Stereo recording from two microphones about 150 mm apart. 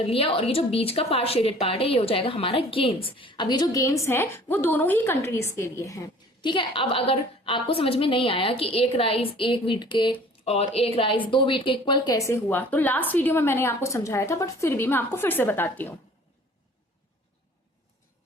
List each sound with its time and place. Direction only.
0.0 s a woman's voice: 40° left (ahead or behind)
10.4 s speech: 40° left (ahead or behind); by 16.0 s 15° left (ahead or behind)